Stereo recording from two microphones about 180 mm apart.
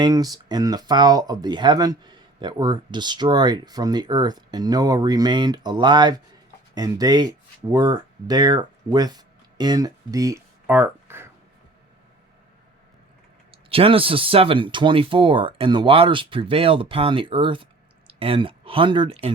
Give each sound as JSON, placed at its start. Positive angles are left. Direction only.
{"t": 0.0, "sound": "speech", "side_deg": -20}
{"t": 13.5, "sound": "speech", "side_deg": -30}